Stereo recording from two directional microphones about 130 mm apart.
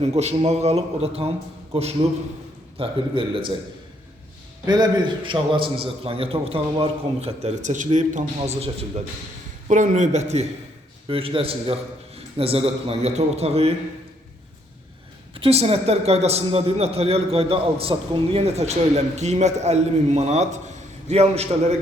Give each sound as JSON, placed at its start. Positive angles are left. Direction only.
{"t": 0.0, "sound": "a man's voice", "side_deg": -55}
{"t": 4.6, "sound": "a man's voice", "side_deg": -30}
{"t": 9.6, "sound": "a man's voice", "side_deg": -75}
{"t": 11.1, "sound": "a man's voice", "side_deg": -45}
{"t": 15.4, "sound": "a man's voice", "side_deg": -50}